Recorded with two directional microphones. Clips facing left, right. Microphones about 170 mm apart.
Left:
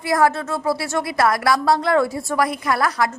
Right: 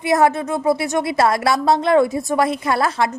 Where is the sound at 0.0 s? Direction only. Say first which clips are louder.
Right 2 dB; 20° right (ahead or behind).